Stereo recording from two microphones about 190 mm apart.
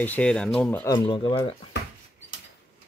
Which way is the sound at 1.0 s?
25° left (ahead or behind).